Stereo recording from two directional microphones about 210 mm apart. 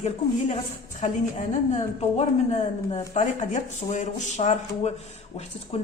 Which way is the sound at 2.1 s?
35° left (ahead or behind).